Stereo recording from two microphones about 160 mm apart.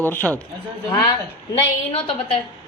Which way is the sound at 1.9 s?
40° left (ahead or behind).